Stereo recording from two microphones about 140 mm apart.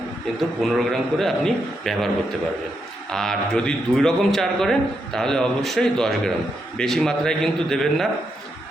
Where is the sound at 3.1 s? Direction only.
5° left (ahead or behind).